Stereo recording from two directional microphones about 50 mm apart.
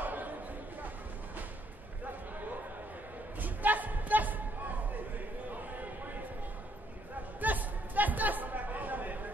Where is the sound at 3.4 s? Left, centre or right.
Right.